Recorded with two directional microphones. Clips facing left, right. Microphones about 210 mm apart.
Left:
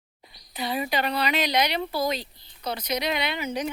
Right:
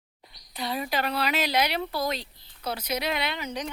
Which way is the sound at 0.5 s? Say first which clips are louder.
Left 2 dB; centre (ahead or behind).